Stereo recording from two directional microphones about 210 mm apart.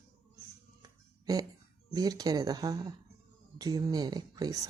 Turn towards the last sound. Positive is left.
turn(degrees=-20)  # may be behind; listen again after turning